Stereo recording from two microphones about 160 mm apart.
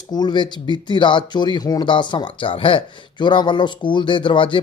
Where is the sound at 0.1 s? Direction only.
25° left (ahead or behind).